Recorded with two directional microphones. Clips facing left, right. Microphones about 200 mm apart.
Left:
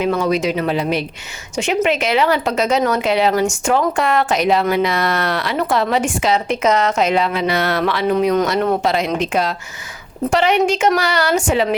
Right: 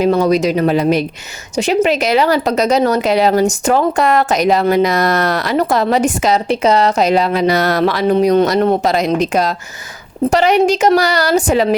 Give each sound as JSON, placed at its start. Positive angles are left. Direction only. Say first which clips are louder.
{"t": 0.0, "sound": "a woman's voice", "louder": "right 5 dB", "side_deg": -40}